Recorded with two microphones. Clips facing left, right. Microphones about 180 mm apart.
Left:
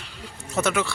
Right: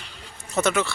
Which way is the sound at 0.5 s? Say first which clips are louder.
Right 1 dB; 10° left (ahead or behind).